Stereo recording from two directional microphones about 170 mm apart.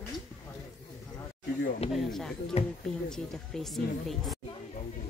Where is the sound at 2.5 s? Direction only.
40° left (ahead or behind).